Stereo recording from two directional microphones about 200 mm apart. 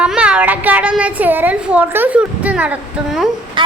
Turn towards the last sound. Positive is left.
turn(degrees=-25)  # may be behind; listen again after turning